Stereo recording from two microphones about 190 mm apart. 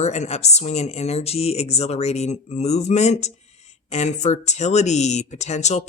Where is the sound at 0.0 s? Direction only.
35° left (ahead or behind).